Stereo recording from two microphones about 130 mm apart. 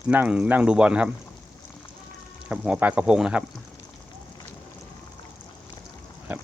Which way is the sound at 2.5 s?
10° right (ahead or behind).